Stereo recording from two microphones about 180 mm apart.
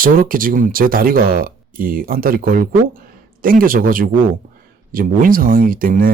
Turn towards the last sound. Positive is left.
turn(degrees=-50)  # may be behind; listen again after turning